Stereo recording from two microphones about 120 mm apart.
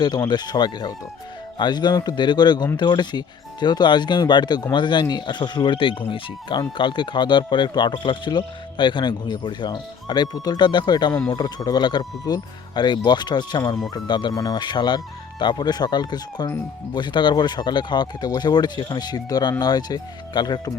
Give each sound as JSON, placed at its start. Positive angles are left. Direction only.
{"t": 0.0, "sound": "speech", "side_deg": 35}